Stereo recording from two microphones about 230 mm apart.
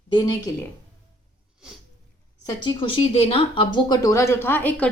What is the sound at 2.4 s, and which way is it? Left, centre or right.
Speech, centre.